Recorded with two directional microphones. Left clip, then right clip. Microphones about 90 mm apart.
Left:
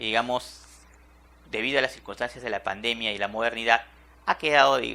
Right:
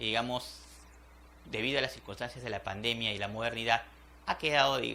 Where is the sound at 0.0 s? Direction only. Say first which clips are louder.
Left 7 dB; 35° left (ahead or behind).